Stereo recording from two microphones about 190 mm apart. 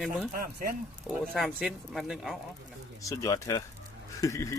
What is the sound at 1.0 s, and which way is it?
Speech, centre (ahead or behind).